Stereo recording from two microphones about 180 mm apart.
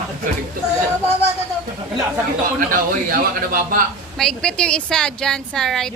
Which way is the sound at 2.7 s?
50° right (ahead or behind).